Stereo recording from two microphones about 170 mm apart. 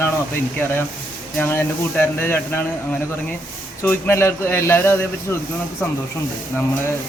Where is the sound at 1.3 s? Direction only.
15° left (ahead or behind).